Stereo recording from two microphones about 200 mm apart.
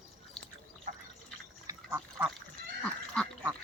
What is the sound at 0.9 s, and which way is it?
Drip, 40° right (ahead or behind).